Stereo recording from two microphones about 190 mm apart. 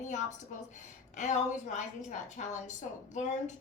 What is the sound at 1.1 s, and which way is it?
A woman's voice, 40° left (ahead or behind).